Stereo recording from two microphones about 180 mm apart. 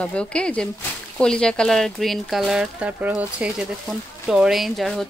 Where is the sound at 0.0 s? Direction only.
5° left (ahead or behind).